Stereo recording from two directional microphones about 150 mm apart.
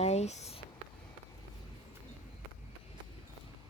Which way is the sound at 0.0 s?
45° left (ahead or behind).